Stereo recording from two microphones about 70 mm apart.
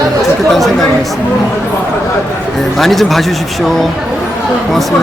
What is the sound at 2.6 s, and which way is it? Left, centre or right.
Speech, centre.